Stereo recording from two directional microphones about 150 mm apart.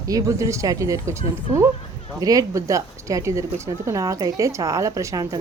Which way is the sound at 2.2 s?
25° right (ahead or behind).